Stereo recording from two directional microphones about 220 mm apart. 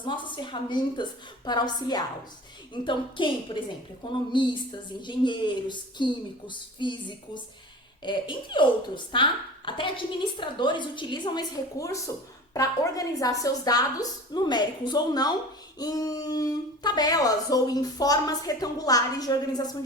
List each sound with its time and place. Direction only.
0.0 s a woman's voice: 20° left (ahead or behind)
8.0 s a woman's voice: 20° left (ahead or behind)